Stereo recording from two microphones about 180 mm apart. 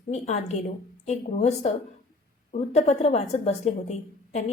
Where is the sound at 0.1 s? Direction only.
35° left (ahead or behind).